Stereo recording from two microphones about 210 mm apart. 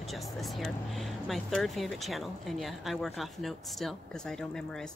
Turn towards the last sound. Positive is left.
turn(degrees=5)  # may be behind; listen again after turning